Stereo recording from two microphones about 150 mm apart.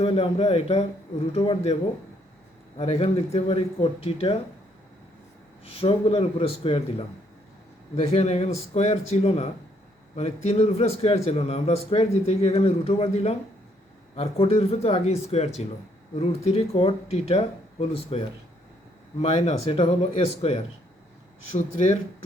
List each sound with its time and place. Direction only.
0.0 s a man's voice: 40° left (ahead or behind)
2.7 s speech: 40° left (ahead or behind)
5.6 s speech: 40° left (ahead or behind)
7.9 s a man's voice: 45° left (ahead or behind)
19.2 s a man's voice: 50° left (ahead or behind)